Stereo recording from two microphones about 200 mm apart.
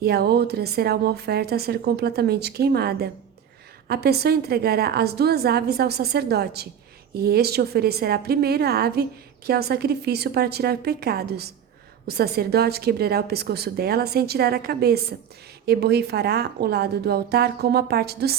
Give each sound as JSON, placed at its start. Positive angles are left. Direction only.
{"t": 0.0, "sound": "a woman's voice", "side_deg": -55}